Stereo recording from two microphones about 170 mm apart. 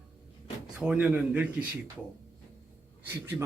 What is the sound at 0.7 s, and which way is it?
Speech, 5° right (ahead or behind).